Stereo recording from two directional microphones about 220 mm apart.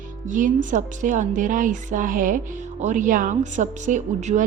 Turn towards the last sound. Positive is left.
turn(degrees=-35)  # may be behind; listen again after turning